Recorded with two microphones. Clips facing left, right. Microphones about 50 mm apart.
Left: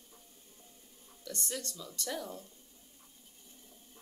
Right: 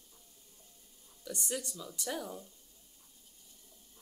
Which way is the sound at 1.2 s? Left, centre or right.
Centre.